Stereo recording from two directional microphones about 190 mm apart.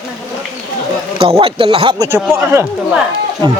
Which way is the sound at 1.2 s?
30° right (ahead or behind).